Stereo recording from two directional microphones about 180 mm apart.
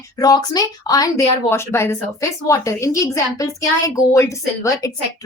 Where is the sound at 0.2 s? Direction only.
20° left (ahead or behind).